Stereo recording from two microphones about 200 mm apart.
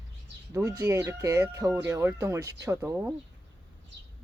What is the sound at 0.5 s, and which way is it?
Speech, 15° right (ahead or behind).